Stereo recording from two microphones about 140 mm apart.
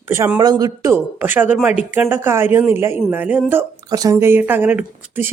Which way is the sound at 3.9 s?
25° right (ahead or behind).